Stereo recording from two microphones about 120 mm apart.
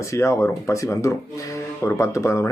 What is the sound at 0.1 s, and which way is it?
Speech, 25° left (ahead or behind).